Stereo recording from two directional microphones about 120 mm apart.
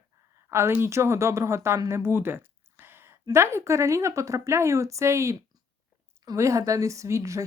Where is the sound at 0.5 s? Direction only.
20° right (ahead or behind).